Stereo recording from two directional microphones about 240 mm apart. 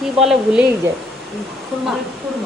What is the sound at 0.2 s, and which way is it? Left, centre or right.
Speech, centre.